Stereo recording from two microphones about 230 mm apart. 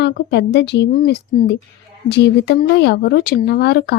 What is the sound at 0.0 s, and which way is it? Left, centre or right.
Speech, left.